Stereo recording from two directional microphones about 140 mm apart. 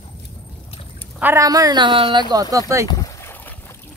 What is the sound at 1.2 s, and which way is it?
Speech, 20° right (ahead or behind).